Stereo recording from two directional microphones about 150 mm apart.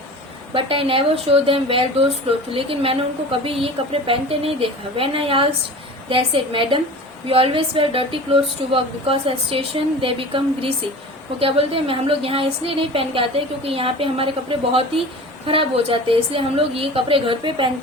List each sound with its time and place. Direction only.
0.5 s a woman's voice: 35° right (ahead or behind)